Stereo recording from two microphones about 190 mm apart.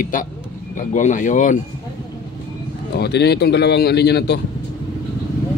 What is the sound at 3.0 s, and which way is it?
A man's voice, 60° left (ahead or behind).